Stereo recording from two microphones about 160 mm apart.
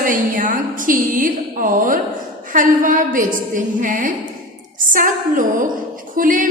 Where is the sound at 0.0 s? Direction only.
60° right (ahead or behind).